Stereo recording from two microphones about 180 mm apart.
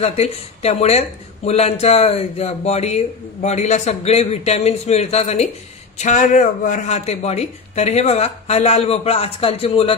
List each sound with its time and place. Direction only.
0.0 s speech: 35° left (ahead or behind)